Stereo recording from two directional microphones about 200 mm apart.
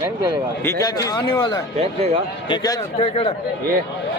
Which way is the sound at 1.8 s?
30° right (ahead or behind).